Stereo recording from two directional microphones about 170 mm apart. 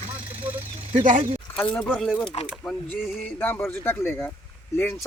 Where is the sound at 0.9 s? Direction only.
50° right (ahead or behind).